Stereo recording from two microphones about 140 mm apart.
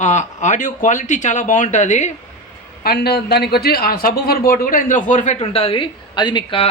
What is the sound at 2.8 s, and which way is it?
A man's voice, 90° left.